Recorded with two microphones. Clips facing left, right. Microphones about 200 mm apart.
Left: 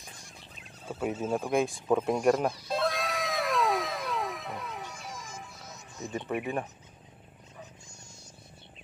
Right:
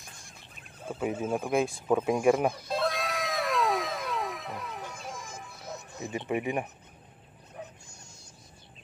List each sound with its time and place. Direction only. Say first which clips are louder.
0.2 s a sound: left 2 dB; 50° right (ahead or behind)
1.2 s speech: even; 5° right (ahead or behind)
2.7 s cat: even; centre (ahead or behind)
4.8 s music: right 2 dB; 55° right (ahead or behind)
6.1 s speech: right 2 dB; 15° right (ahead or behind)